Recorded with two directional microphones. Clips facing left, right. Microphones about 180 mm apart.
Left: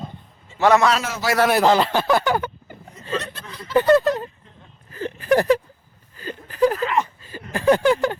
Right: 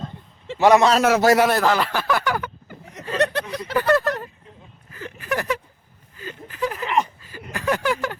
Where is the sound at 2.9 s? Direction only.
70° right (ahead or behind).